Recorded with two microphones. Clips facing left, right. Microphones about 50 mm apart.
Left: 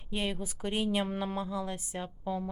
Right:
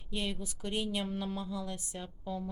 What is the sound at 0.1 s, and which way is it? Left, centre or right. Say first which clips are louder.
A woman's voice: left 3 dB; centre.